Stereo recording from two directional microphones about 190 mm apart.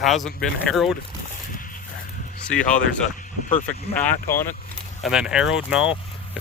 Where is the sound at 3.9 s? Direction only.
15° left (ahead or behind).